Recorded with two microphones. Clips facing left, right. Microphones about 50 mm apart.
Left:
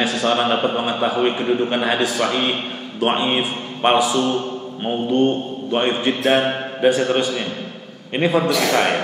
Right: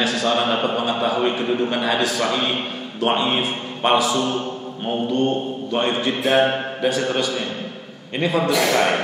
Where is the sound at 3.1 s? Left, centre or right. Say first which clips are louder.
Even; centre.